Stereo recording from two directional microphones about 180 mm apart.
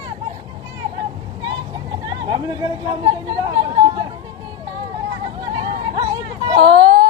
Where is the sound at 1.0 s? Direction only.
25° right (ahead or behind).